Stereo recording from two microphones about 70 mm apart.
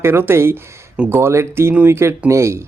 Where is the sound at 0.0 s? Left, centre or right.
Right.